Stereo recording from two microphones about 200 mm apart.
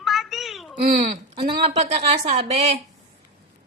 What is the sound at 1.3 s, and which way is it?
A woman's voice, 30° right (ahead or behind).